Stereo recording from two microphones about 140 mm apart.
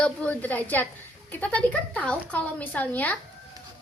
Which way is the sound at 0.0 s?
10° left (ahead or behind).